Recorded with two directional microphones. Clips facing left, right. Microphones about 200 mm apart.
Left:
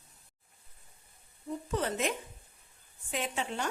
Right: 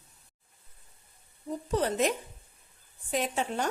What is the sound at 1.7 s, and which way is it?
A woman's voice, 35° right (ahead or behind).